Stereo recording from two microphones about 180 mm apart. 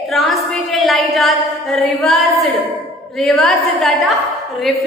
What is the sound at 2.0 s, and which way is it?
A woman's voice, centre (ahead or behind).